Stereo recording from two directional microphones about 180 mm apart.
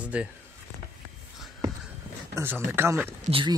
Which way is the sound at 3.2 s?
30° right (ahead or behind).